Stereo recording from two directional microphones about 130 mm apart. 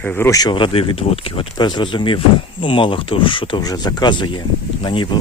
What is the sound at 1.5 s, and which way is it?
Speech, 35° left (ahead or behind).